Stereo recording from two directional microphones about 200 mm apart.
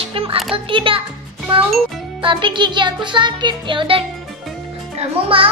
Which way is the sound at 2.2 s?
25° right (ahead or behind).